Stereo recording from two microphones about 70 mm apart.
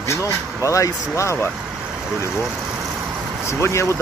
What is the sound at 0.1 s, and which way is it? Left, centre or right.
Speech, left.